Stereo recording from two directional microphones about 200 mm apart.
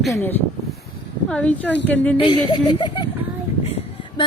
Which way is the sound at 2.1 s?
25° left (ahead or behind).